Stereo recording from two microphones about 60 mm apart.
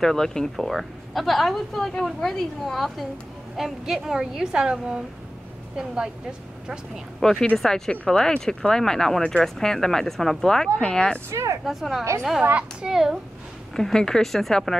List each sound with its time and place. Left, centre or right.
0.0 s a woman's voice: centre
7.2 s speech: centre
11.1 s speech: right
11.6 s a woman's voice: centre
13.7 s speech: centre